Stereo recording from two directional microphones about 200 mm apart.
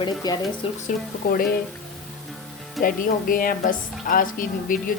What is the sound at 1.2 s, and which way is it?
Speech, 50° left (ahead or behind).